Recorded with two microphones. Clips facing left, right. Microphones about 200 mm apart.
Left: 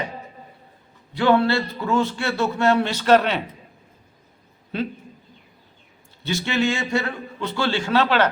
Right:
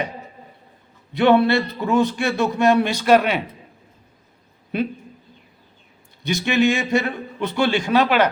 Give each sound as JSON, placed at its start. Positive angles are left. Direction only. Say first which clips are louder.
{"t": 1.1, "sound": "a man's voice", "louder": "right 3 dB", "side_deg": -20}
{"t": 4.7, "sound": "a man's voice", "louder": "right 3 dB", "side_deg": -15}
{"t": 6.2, "sound": "a man's voice", "louder": "right 4 dB", "side_deg": -15}